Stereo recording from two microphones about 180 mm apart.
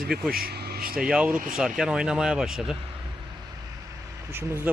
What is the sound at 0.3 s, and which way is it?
Speech, 55° right (ahead or behind).